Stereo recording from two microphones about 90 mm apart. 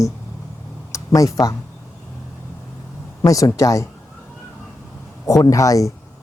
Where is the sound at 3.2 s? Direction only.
40° left (ahead or behind).